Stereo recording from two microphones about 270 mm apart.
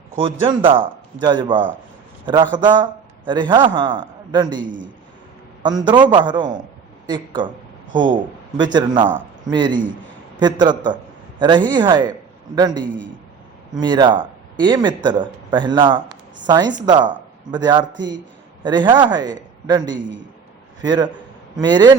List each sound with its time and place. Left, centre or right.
0.2 s a man's voice: centre
4.6 s a man's voice: right
5.6 s speech: centre
13.8 s speech: centre